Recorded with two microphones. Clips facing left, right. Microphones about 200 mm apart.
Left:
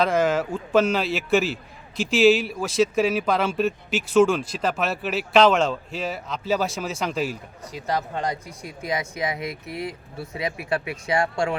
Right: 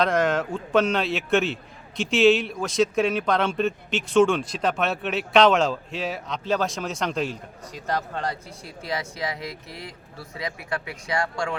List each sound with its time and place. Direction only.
0.0 s speech: 5° left (ahead or behind); by 11.5 s 25° left (ahead or behind)